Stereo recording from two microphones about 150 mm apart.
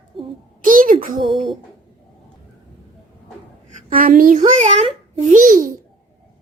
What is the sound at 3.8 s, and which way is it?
A child's voice, 70° right (ahead or behind).